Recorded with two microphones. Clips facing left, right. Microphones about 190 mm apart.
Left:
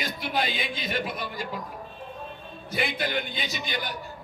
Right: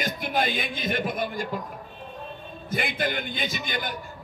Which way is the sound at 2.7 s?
50° right (ahead or behind).